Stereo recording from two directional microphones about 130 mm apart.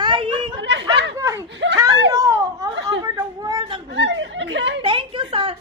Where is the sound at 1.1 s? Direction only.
25° right (ahead or behind).